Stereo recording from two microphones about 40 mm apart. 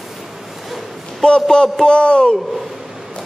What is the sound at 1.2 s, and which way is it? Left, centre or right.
A man's voice, centre.